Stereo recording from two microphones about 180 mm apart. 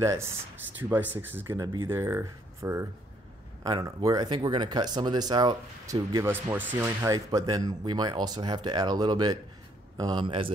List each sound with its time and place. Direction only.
0.0 s speech: 15° right (ahead or behind)
1.5 s speech: 20° right (ahead or behind)